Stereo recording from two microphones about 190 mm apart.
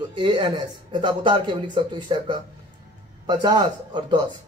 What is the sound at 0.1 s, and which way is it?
Speech, 25° right (ahead or behind).